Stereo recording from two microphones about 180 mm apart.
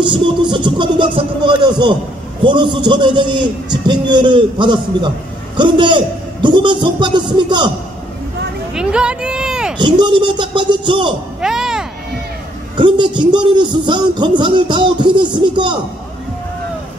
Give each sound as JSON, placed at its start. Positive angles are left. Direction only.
{"t": 0.0, "sound": "a man's voice", "side_deg": -25}
{"t": 8.7, "sound": "speech", "side_deg": -5}
{"t": 9.8, "sound": "a man's voice", "side_deg": -25}
{"t": 11.4, "sound": "music", "side_deg": -5}
{"t": 12.7, "sound": "a man's voice", "side_deg": -25}